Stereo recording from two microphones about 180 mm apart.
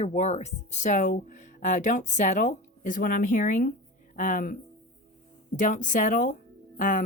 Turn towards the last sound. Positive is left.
turn(degrees=45)  # may be behind; listen again after turning